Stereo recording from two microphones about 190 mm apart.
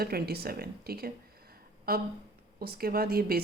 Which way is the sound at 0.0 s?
55° right (ahead or behind).